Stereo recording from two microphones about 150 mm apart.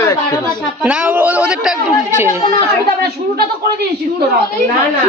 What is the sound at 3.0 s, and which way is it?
Speech, 90° right.